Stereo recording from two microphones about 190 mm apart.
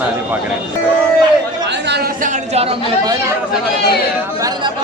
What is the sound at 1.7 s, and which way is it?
Chatter, 60° right (ahead or behind).